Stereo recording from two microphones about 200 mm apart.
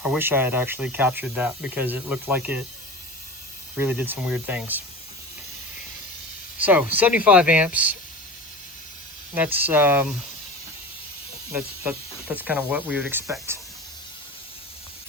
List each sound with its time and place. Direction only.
0.0 s speech: 10° right (ahead or behind)
3.8 s speech: 10° right (ahead or behind)
6.6 s speech: 10° right (ahead or behind)
9.3 s speech: 10° right (ahead or behind)
11.5 s speech: 10° right (ahead or behind)